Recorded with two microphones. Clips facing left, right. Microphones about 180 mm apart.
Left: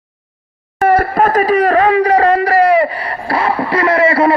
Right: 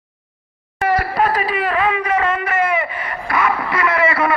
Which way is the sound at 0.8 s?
50° left (ahead or behind).